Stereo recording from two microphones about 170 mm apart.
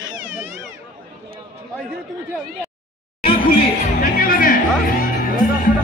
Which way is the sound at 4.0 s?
55° left (ahead or behind).